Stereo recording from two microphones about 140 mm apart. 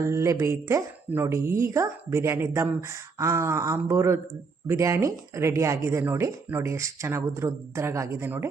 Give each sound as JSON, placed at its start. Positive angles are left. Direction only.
{"t": 0.0, "sound": "speech", "side_deg": -20}